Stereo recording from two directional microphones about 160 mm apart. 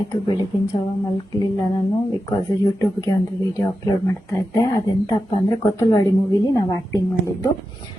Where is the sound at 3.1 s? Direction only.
20° left (ahead or behind).